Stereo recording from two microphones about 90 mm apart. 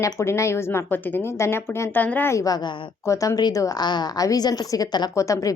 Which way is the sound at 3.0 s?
35° left (ahead or behind).